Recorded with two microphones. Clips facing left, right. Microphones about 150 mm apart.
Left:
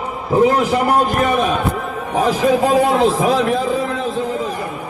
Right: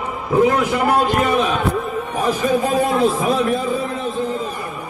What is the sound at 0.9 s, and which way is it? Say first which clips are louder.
Speech: left 1 dB; 45° left (ahead or behind).